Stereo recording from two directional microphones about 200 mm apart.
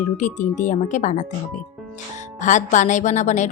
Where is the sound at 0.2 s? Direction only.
35° left (ahead or behind).